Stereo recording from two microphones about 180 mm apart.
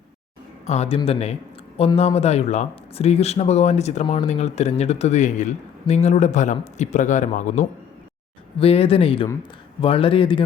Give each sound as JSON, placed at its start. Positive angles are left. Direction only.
{"t": 0.7, "sound": "speech", "side_deg": 35}